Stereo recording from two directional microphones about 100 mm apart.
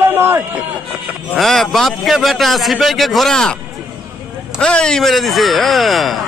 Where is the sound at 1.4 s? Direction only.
Centre (ahead or behind).